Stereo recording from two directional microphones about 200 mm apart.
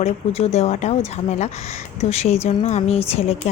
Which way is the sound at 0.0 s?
30° left (ahead or behind).